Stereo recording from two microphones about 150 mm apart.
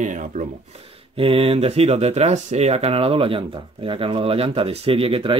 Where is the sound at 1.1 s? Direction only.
40° right (ahead or behind).